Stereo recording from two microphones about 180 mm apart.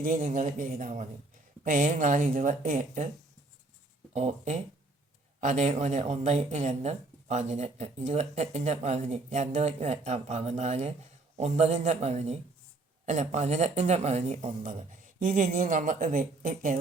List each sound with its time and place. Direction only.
0.0 s speech: 45° right (ahead or behind)
4.1 s speech: 40° right (ahead or behind)